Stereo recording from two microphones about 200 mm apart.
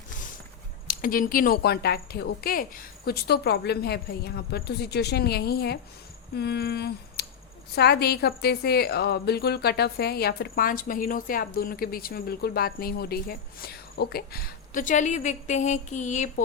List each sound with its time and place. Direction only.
0.9 s a woman's voice: 45° left (ahead or behind)
6.3 s a sound: 55° left (ahead or behind)
7.8 s a woman's voice: 55° left (ahead or behind); by 16.3 s 35° left (ahead or behind)